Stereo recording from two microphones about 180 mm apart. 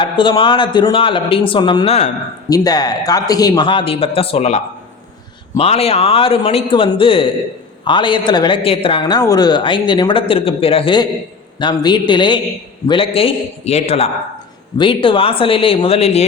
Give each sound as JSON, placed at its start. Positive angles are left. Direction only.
{"t": 0.0, "sound": "speech", "side_deg": 30}
{"t": 2.5, "sound": "speech", "side_deg": 20}